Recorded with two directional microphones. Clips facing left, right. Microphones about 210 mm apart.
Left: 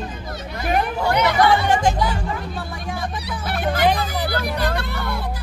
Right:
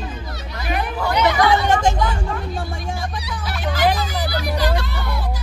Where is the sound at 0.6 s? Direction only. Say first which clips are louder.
Left 3 dB; 45° left (ahead or behind).